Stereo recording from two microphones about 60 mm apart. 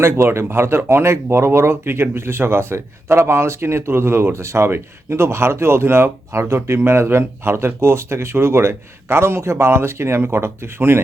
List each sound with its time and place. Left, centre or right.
0.0 s speech: right